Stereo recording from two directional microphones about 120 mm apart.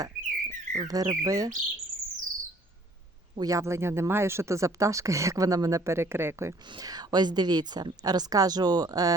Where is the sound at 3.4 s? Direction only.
25° right (ahead or behind).